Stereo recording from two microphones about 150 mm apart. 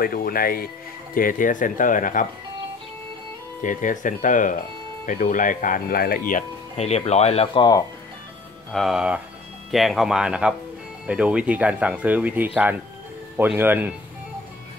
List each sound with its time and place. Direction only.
0.0 s speech: 75° left (ahead or behind)
1.1 s speech: 65° left (ahead or behind)
3.6 s speech: 60° left (ahead or behind)
6.8 s speech: 45° left (ahead or behind)
8.7 s speech: centre (ahead or behind)